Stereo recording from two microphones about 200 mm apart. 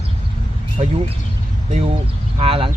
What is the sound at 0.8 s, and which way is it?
Speech, 35° right (ahead or behind).